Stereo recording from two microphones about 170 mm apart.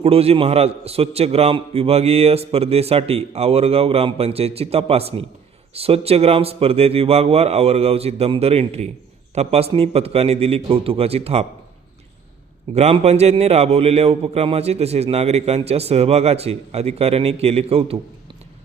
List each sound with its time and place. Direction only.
0.0 s a man's voice: 35° right (ahead or behind)
12.7 s a man's voice: 35° right (ahead or behind)